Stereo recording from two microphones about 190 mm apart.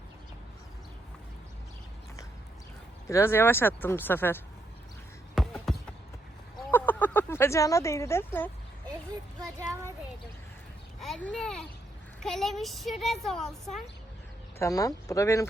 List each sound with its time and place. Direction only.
3.1 s speech: 15° left (ahead or behind)
5.3 s basketball bounce: centre (ahead or behind)
6.7 s a sound: 10° left (ahead or behind)
11.0 s a child's voice: 5° left (ahead or behind)
14.6 s speech: 20° left (ahead or behind)